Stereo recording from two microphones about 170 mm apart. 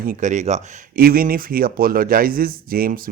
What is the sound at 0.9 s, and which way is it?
Speech, 60° right (ahead or behind).